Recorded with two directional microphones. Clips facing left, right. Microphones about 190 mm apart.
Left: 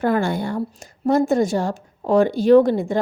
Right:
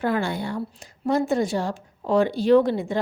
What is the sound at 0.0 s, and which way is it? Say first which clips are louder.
A woman's voice: left 4 dB; 45° left (ahead or behind).